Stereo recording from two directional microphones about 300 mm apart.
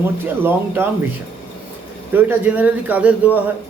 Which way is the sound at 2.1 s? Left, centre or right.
Centre.